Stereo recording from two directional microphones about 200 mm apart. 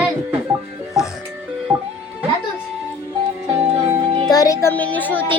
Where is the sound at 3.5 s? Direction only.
30° right (ahead or behind).